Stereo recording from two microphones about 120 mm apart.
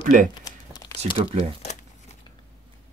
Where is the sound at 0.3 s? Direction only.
35° left (ahead or behind).